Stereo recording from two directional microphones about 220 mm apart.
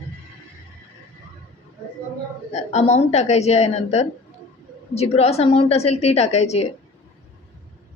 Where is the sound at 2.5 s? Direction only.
30° left (ahead or behind).